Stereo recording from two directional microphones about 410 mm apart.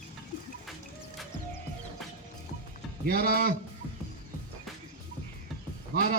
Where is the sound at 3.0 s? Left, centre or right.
Right.